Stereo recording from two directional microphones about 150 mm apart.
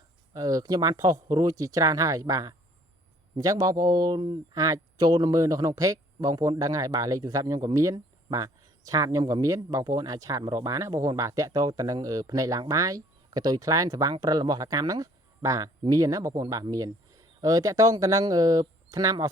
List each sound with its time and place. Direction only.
0.3 s speech: 25° right (ahead or behind)